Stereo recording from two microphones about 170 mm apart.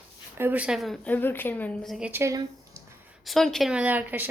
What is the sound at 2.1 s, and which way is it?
Speech, 15° right (ahead or behind).